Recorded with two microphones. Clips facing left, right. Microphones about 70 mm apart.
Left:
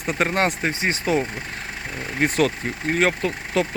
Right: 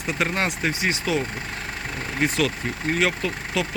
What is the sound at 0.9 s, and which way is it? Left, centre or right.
Speech, left.